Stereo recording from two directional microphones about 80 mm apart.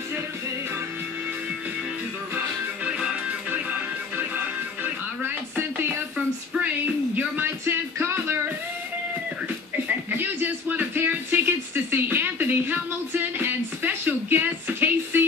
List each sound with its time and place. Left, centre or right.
2.3 s music: centre
7.2 s music: right
9.8 s a sound: right